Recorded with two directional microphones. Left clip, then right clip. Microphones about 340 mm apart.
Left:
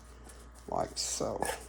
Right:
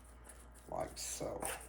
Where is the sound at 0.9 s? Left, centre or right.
Left.